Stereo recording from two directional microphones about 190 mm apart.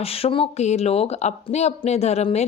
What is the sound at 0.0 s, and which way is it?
Speech, 30° left (ahead or behind).